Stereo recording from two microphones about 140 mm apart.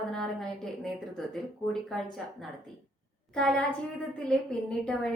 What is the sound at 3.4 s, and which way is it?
A woman's voice, 5° left (ahead or behind).